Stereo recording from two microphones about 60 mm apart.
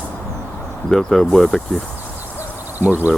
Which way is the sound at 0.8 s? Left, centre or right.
Centre.